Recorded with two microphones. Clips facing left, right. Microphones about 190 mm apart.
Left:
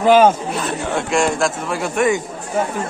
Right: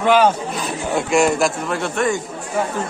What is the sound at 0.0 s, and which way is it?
Speech, 40° left (ahead or behind).